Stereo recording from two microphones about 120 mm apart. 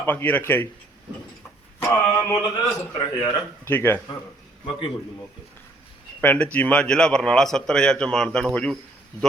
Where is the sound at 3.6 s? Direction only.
20° left (ahead or behind).